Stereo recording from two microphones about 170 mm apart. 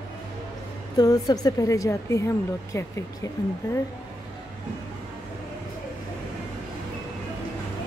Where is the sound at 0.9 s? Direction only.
20° left (ahead or behind).